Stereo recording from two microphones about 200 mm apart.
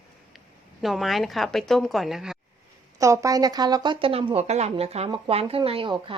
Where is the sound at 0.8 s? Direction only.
Centre (ahead or behind).